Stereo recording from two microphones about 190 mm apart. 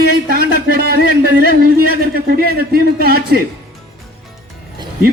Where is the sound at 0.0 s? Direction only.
55° right (ahead or behind).